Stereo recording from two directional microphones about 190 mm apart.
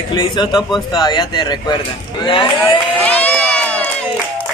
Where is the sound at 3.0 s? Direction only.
5° left (ahead or behind).